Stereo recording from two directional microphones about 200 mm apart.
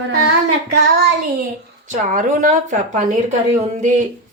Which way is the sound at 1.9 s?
40° right (ahead or behind).